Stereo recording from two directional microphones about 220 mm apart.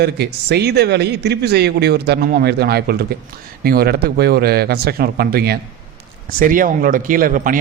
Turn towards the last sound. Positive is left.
turn(degrees=-40)  # may be behind; listen again after turning